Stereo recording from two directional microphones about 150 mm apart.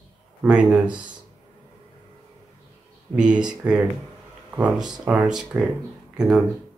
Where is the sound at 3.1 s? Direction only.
5° right (ahead or behind).